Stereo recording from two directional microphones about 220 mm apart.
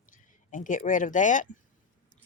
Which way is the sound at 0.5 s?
35° left (ahead or behind).